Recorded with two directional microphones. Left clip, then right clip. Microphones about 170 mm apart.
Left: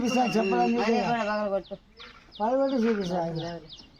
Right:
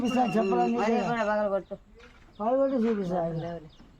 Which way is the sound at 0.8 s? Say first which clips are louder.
Left 1 dB; centre (ahead or behind).